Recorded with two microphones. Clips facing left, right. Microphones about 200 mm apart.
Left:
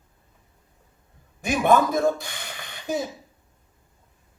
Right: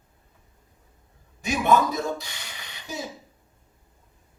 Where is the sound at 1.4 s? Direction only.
50° left (ahead or behind).